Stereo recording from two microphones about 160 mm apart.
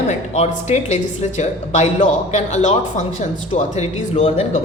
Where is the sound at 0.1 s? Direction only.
45° left (ahead or behind).